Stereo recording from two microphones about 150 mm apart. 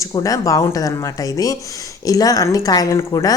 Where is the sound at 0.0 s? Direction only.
20° left (ahead or behind).